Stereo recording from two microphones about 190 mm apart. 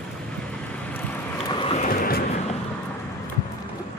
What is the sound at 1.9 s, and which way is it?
Vehicle, 50° left (ahead or behind).